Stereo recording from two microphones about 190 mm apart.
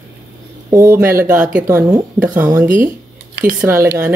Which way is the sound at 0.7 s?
15° right (ahead or behind).